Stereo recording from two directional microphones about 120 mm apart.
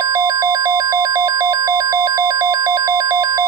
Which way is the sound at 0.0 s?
25° right (ahead or behind).